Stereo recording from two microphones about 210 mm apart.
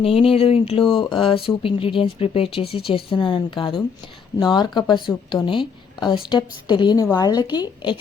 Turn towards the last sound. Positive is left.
turn(degrees=20)  # may be behind; listen again after turning